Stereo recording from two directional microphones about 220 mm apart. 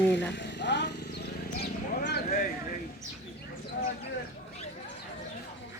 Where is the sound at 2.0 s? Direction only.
45° left (ahead or behind).